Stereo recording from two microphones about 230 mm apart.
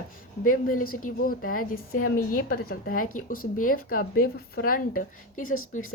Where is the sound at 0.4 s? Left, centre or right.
Left.